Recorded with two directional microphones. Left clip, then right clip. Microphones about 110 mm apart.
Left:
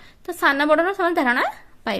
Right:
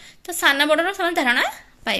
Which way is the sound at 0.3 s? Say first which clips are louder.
Even; 55° left (ahead or behind).